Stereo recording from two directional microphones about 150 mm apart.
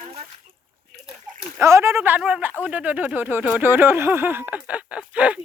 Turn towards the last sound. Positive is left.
turn(degrees=-10)  # may be behind; listen again after turning